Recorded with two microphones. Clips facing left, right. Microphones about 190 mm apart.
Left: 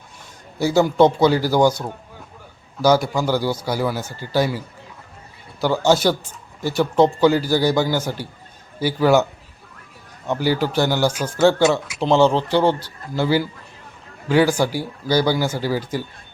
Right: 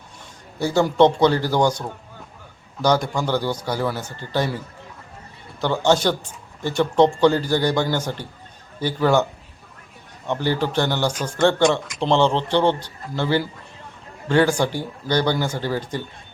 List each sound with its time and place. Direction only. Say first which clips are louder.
0.6 s speech: left 1 dB; 5° left (ahead or behind)
2.8 s speech: left 3 dB; 5° left (ahead or behind)
10.2 s speech: left 2 dB; 5° left (ahead or behind)